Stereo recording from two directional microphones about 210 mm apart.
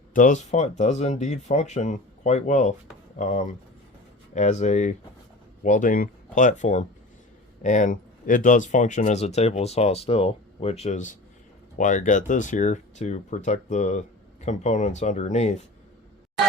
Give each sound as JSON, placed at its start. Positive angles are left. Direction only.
{"t": 0.1, "sound": "speech", "side_deg": 40}